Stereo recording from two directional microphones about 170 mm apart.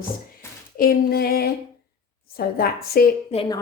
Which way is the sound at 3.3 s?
40° left (ahead or behind).